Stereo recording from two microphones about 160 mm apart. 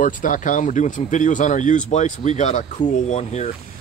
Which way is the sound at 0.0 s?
55° left (ahead or behind).